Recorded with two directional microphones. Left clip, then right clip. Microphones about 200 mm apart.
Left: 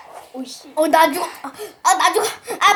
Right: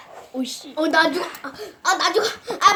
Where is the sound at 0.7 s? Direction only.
40° left (ahead or behind).